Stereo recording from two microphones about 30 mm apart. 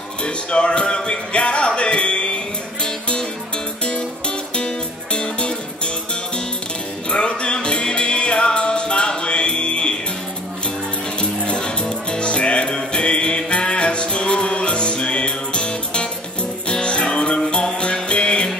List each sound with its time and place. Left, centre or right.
0.2 s speech: left
1.8 s music: left
4.6 s music: left
7.1 s music: left
11.1 s music: left